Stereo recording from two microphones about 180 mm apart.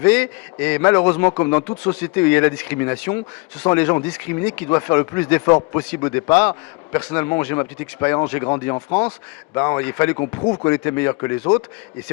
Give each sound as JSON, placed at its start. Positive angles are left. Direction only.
{"t": 0.0, "sound": "a man's voice", "side_deg": 10}
{"t": 8.9, "sound": "speech", "side_deg": 35}
{"t": 9.6, "sound": "a man's voice", "side_deg": 15}
{"t": 10.4, "sound": "speech", "side_deg": 25}
{"t": 10.7, "sound": "a man's voice", "side_deg": 15}